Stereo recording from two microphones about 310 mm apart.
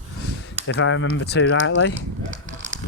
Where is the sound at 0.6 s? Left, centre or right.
Left.